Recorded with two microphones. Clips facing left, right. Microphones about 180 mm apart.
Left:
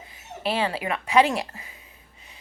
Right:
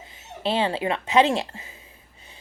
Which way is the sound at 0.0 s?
25° right (ahead or behind).